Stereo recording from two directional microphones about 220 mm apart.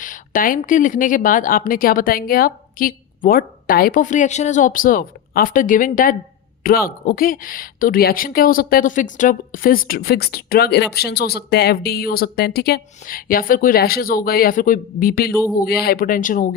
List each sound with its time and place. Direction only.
0.0 s speech: 35° left (ahead or behind)